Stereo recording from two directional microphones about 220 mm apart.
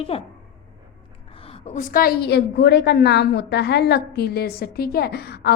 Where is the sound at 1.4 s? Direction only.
30° left (ahead or behind).